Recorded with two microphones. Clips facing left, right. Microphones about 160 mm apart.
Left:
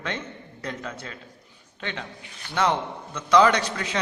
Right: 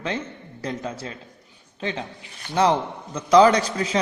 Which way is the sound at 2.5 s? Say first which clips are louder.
Right 4 dB; 35° right (ahead or behind).